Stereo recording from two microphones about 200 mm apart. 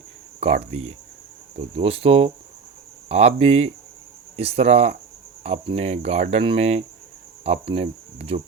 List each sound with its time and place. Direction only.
0.3 s speech: 35° right (ahead or behind)